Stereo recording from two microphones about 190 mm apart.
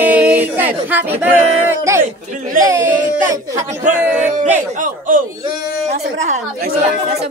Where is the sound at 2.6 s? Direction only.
20° right (ahead or behind).